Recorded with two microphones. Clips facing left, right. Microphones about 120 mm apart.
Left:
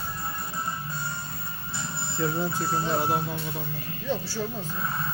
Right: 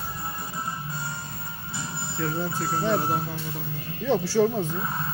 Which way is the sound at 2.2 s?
10° left (ahead or behind).